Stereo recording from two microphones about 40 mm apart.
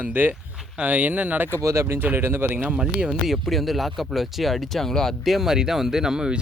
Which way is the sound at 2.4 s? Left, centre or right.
Right.